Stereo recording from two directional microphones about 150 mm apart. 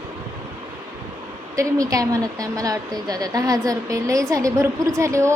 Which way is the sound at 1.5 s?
25° right (ahead or behind).